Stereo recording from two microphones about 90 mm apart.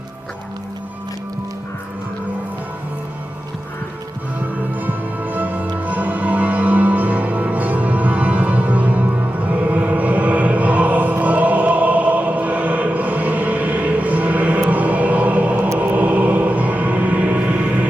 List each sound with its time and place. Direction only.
4.8 s music: 20° right (ahead or behind)